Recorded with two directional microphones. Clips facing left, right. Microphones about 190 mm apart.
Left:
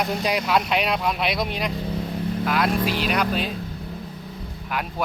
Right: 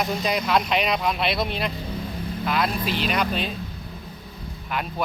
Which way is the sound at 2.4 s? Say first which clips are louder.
Left 2 dB; 10° left (ahead or behind).